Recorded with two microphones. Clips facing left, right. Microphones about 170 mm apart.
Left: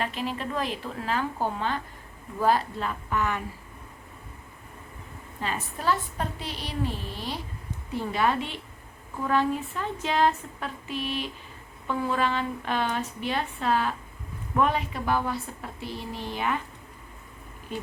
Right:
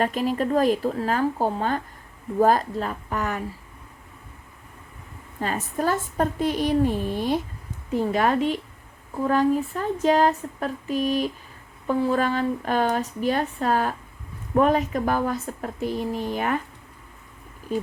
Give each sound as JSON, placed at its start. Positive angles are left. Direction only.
{"t": 0.0, "sound": "a woman's voice", "side_deg": -45}
{"t": 5.4, "sound": "a woman's voice", "side_deg": -45}